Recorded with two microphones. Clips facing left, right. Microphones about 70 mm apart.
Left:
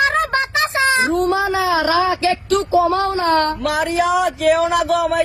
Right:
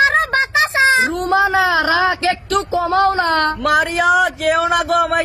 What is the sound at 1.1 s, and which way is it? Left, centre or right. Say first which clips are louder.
Speech: right 2 dB; right.